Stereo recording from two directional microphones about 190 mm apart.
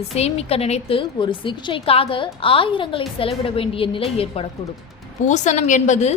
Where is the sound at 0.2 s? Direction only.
30° left (ahead or behind).